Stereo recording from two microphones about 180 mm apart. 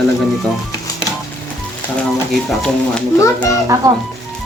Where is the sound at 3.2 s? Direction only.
15° left (ahead or behind).